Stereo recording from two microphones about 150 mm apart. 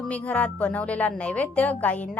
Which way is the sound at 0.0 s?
10° left (ahead or behind).